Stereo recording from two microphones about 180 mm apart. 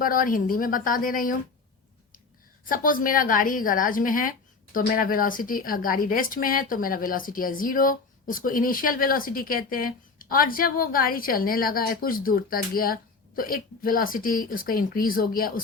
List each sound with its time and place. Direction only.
0.0 s a woman's voice: 50° left (ahead or behind)
2.6 s a woman's voice: 50° left (ahead or behind)